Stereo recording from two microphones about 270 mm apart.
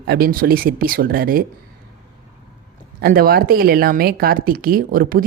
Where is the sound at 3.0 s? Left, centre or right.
Right.